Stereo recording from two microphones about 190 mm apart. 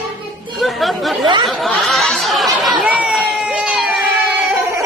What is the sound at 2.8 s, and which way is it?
Crowd, 5° right (ahead or behind).